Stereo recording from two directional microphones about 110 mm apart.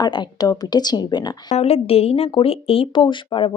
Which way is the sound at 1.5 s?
70° left (ahead or behind).